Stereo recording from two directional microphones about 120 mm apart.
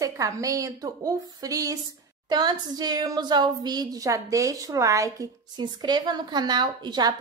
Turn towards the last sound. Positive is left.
turn(degrees=-35)  # may be behind; listen again after turning